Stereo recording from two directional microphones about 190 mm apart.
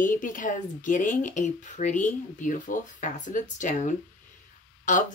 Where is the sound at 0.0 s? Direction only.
45° left (ahead or behind).